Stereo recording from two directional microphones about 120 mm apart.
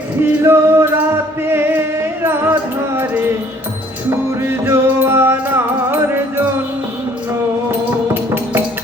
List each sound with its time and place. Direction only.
0.2 s music: 20° right (ahead or behind)
7.7 s music: 15° right (ahead or behind)